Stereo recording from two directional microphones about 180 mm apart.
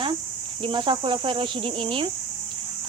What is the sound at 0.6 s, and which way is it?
Speech, 30° right (ahead or behind).